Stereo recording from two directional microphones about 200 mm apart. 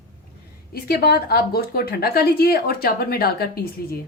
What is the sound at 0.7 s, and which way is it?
Speech, 50° left (ahead or behind).